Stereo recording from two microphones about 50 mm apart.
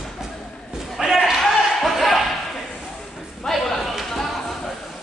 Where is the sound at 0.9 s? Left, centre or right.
Centre.